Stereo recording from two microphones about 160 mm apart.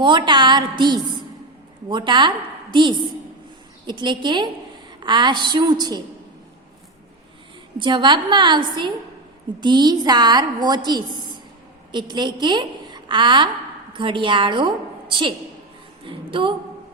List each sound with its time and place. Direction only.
0.0 s a woman's voice: 30° right (ahead or behind)
7.8 s a woman's voice: 30° right (ahead or behind)
16.0 s a sound: 30° right (ahead or behind)